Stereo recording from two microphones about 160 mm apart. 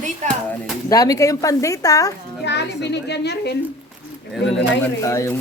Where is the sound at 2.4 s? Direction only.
90° left.